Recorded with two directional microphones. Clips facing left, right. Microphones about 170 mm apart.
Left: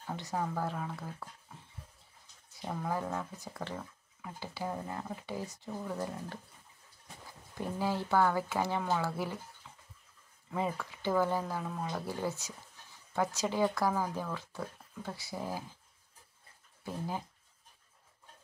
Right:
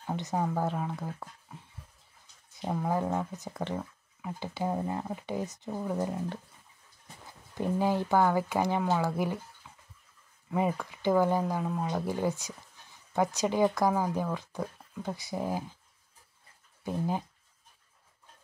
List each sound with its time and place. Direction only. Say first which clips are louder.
0.0 s speech: right 5 dB; 20° right (ahead or behind)
2.6 s speech: right 5 dB; 25° right (ahead or behind)
7.8 s speech: right 3 dB; 15° right (ahead or behind)
9.6 s a sound: right 1 dB; 10° right (ahead or behind)
10.5 s speech: right 5 dB; 15° right (ahead or behind)
16.8 s speech: right 6 dB; 20° right (ahead or behind)